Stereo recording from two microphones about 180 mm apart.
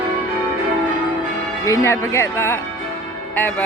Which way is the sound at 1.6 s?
15° left (ahead or behind).